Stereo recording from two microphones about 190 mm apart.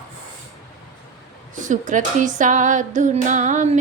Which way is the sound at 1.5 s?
40° right (ahead or behind).